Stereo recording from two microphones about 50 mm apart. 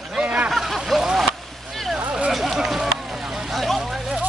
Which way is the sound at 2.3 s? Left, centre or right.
Centre.